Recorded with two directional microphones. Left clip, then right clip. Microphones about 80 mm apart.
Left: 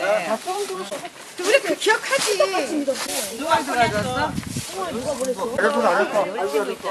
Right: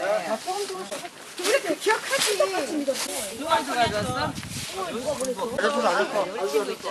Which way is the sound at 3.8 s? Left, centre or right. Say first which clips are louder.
Left 4 dB; centre.